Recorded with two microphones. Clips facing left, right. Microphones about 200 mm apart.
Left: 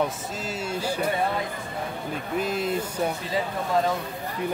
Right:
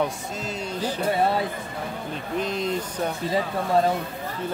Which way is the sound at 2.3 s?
5° left (ahead or behind).